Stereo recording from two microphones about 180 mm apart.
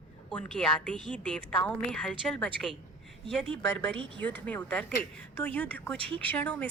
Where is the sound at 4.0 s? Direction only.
25° right (ahead or behind).